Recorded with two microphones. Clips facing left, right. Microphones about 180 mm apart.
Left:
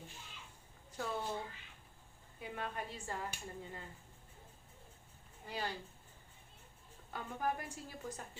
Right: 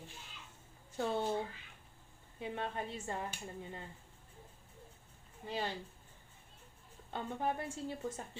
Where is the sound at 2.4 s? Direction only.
25° right (ahead or behind).